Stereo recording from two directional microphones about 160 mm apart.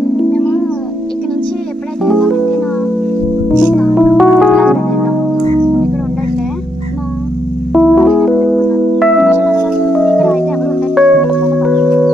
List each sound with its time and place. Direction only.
0.2 s music: 5° left (ahead or behind)
2.0 s music: centre (ahead or behind)
3.7 s music: centre (ahead or behind)
7.7 s keyboard: centre (ahead or behind)
8.9 s music: centre (ahead or behind)